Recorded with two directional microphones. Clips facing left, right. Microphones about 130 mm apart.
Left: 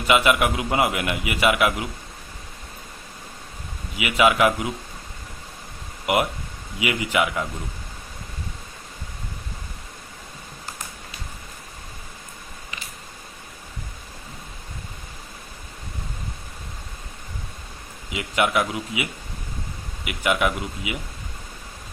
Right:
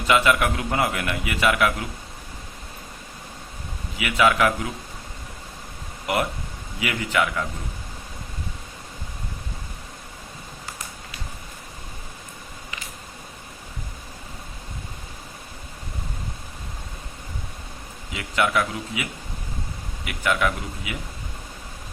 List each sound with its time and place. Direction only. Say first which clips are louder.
0.1 s a man's voice: left 1 dB; 15° left (ahead or behind)
3.9 s a man's voice: left 1 dB; 15° left (ahead or behind)
6.7 s a man's voice: left 1 dB; 15° left (ahead or behind)
18.1 s a man's voice: left 1 dB; 15° left (ahead or behind)
20.1 s a man's voice: left 1 dB; 15° left (ahead or behind)